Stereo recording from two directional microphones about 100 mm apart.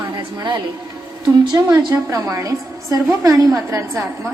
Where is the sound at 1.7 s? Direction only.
25° right (ahead or behind).